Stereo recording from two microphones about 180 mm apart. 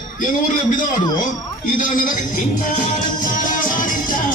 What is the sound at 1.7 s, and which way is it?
Speech, 50° left (ahead or behind).